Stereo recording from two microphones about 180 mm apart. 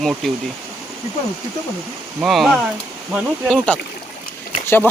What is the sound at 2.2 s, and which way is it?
Speech, centre (ahead or behind).